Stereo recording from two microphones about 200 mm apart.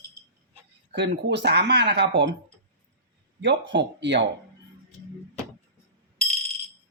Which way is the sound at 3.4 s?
60° right (ahead or behind).